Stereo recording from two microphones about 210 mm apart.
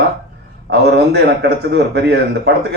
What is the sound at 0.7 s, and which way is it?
A man's voice, 55° right (ahead or behind).